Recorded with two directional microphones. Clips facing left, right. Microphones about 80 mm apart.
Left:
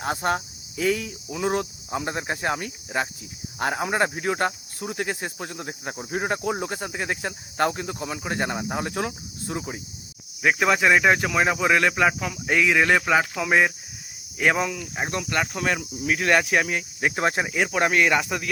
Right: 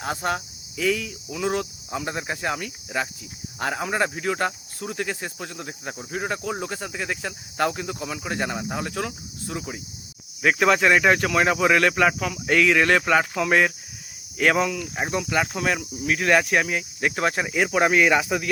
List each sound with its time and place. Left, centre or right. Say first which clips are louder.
0.0 s speech: left 2 dB; centre
4.4 s cricket: left 1 dB; centre
7.6 s speech: even; centre
9.0 s cricket: left 1 dB; left
10.4 s speech: right 1 dB; centre
15.0 s speech: right 2 dB; centre
17.1 s cricket: even; left
17.4 s speech: right 2 dB; centre